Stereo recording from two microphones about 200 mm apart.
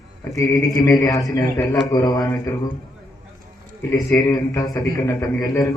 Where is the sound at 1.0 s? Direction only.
20° left (ahead or behind).